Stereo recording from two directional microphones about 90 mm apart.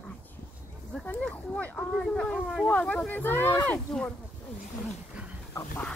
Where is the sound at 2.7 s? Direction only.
15° left (ahead or behind).